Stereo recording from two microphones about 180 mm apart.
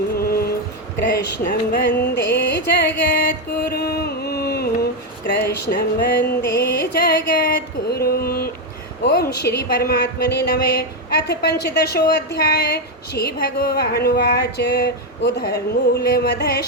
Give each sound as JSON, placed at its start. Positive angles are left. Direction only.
{"t": 0.2, "sound": "music", "side_deg": 60}
{"t": 6.9, "sound": "a sound", "side_deg": 55}
{"t": 9.0, "sound": "a woman's voice", "side_deg": 60}